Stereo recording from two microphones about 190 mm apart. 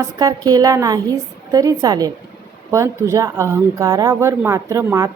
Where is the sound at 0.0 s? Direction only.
20° right (ahead or behind).